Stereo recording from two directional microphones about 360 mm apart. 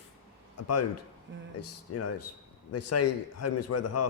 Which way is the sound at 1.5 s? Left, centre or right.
Left.